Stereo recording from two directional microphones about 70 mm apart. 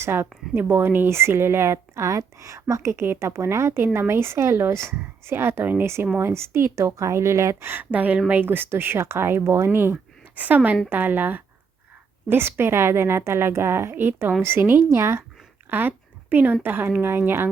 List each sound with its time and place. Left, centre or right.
0.0 s speech: right
2.0 s a woman's voice: right
7.7 s a woman's voice: right
15.7 s speech: right